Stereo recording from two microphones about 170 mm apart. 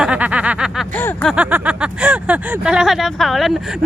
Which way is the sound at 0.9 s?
10° left (ahead or behind).